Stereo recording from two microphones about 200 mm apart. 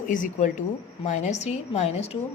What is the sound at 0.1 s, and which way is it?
A woman's voice, 40° left (ahead or behind).